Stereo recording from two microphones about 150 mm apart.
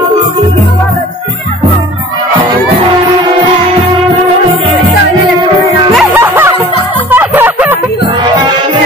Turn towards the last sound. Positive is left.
turn(degrees=-10)  # may be behind; listen again after turning